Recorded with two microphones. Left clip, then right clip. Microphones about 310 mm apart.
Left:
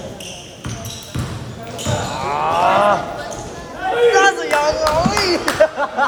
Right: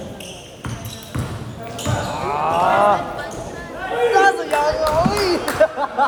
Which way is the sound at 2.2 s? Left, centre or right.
Left.